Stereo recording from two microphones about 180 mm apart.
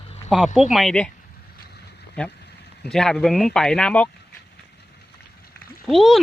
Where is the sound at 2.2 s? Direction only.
5° left (ahead or behind).